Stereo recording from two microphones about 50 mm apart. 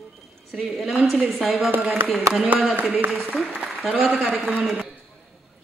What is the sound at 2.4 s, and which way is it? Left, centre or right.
Speech, right.